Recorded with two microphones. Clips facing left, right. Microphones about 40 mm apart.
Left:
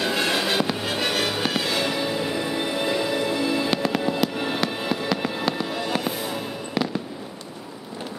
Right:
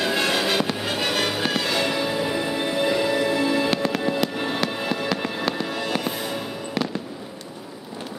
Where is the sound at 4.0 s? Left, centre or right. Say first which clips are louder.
Even; centre.